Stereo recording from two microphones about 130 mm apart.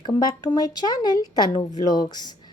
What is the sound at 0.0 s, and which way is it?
Speech, 35° left (ahead or behind).